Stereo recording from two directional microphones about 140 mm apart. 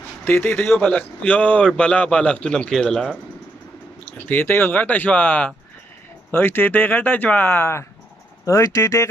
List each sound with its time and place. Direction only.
0.2 s speech: 15° left (ahead or behind)
4.3 s speech: 15° left (ahead or behind)